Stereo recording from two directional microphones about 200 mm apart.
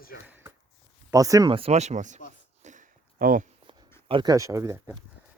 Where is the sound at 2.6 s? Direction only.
40° right (ahead or behind).